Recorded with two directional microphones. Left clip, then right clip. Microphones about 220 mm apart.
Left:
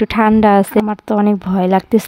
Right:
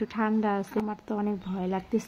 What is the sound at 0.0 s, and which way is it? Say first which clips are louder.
A woman's voice: left 17 dB; 50° left (ahead or behind).